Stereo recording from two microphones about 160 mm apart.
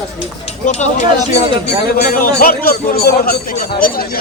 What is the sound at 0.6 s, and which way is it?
Speech, 50° left (ahead or behind).